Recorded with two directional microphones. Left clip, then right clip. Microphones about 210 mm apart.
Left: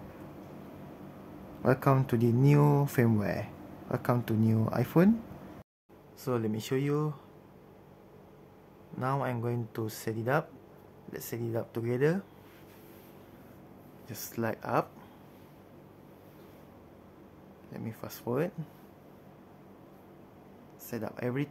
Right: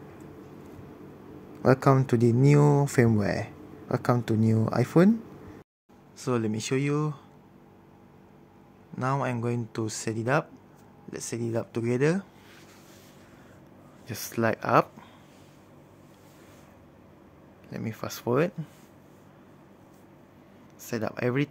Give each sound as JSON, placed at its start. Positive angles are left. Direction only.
{"t": 1.6, "sound": "speech", "side_deg": -15}
{"t": 6.1, "sound": "speech", "side_deg": -15}
{"t": 8.9, "sound": "speech", "side_deg": -15}
{"t": 14.0, "sound": "speech", "side_deg": -20}
{"t": 17.6, "sound": "speech", "side_deg": -20}
{"t": 20.8, "sound": "speech", "side_deg": -20}